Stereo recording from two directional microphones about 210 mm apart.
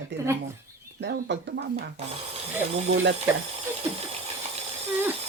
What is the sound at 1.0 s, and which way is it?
Speech, 55° right (ahead or behind).